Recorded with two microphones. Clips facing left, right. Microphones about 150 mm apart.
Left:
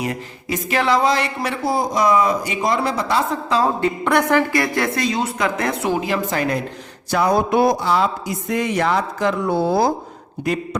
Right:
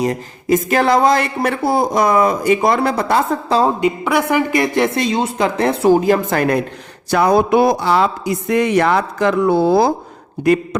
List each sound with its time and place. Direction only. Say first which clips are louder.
0.0 s speech: right 6 dB; 40° right (ahead or behind)
3.8 s speech: right 2 dB; 10° right (ahead or behind); by 6.6 s 55° right (ahead or behind)
7.1 s speech: right 4 dB; 70° right (ahead or behind); by 9.9 s 90° right
10.4 s speech: right 8 dB; 60° right (ahead or behind)